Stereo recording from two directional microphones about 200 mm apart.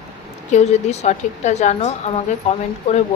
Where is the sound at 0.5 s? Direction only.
35° left (ahead or behind).